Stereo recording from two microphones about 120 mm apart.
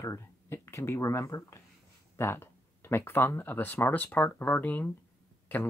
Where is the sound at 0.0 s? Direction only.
20° left (ahead or behind).